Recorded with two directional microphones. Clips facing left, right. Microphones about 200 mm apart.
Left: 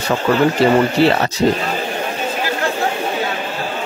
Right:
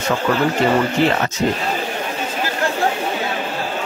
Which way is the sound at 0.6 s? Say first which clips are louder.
Left 3 dB; 35° left (ahead or behind).